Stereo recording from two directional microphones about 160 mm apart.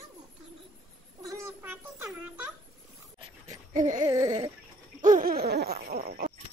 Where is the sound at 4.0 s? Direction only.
20° right (ahead or behind).